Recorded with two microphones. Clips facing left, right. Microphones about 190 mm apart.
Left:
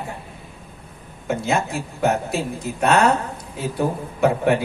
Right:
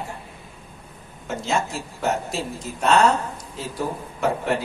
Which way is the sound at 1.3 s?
60° left (ahead or behind).